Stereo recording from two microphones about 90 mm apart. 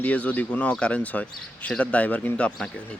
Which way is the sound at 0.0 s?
15° left (ahead or behind).